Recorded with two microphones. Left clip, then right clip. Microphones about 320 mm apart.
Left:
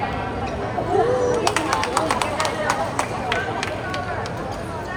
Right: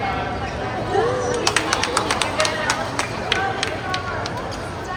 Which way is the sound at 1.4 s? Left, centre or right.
Centre.